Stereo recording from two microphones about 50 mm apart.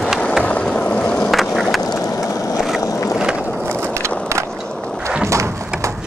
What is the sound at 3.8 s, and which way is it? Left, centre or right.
Skateboard, right.